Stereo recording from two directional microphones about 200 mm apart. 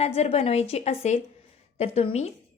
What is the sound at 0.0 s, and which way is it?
A woman's voice, 30° left (ahead or behind).